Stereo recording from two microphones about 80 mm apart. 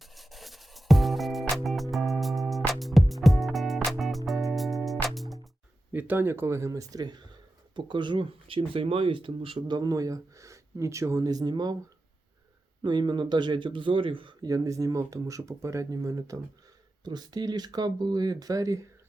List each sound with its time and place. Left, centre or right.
0.0 s music: centre
5.9 s speech: right
7.0 s speech: right
7.8 s speech: right
9.9 s speech: right
12.8 s speech: right
14.4 s speech: right
17.0 s speech: right